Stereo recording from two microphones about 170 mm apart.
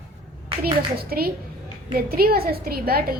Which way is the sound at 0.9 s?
60° right (ahead or behind).